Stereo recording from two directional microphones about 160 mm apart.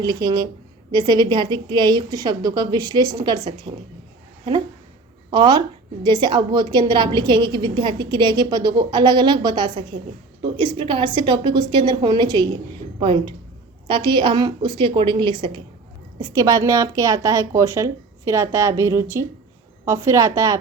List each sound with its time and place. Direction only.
0.0 s a woman's voice: 25° right (ahead or behind)
5.3 s a woman's voice: 30° right (ahead or behind)